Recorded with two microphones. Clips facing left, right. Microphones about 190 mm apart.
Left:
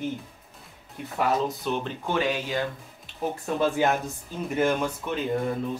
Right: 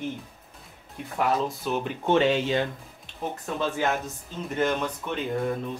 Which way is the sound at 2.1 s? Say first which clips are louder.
Right 5 dB; 25° right (ahead or behind).